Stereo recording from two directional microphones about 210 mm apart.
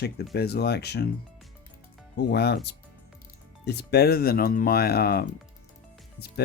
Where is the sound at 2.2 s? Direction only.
50° left (ahead or behind).